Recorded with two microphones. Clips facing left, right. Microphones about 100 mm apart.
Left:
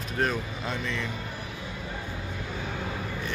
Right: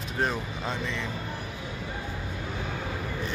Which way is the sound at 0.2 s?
25° right (ahead or behind).